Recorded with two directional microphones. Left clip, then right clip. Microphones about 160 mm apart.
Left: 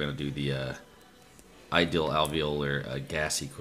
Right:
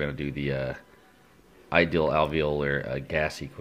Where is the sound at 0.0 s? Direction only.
20° right (ahead or behind).